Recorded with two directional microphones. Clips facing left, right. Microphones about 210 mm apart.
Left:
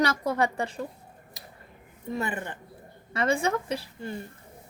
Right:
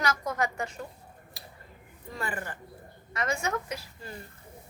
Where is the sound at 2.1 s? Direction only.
20° left (ahead or behind).